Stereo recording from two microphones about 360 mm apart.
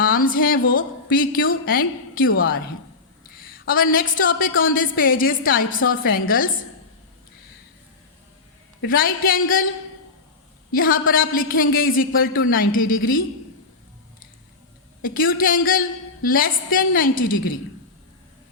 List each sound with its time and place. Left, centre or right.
0.0 s a woman's voice: left
8.8 s a woman's voice: left
10.7 s a woman's voice: left
15.0 s a woman's voice: left